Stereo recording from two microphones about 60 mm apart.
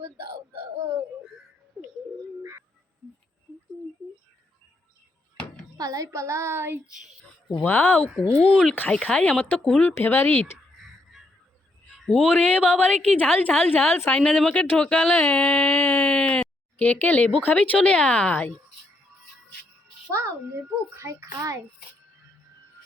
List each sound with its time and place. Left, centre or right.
5.7 s child singing: right
7.7 s speech: left
8.2 s a woman's voice: centre
9.9 s speech: left
12.3 s a woman's voice: left
14.2 s speech: centre
15.3 s a sound: centre
17.4 s a woman's voice: left
20.1 s a child's voice: right